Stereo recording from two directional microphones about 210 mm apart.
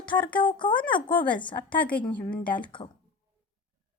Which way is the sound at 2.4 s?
25° left (ahead or behind).